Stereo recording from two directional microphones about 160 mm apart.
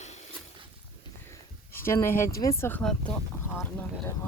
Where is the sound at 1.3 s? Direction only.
15° left (ahead or behind).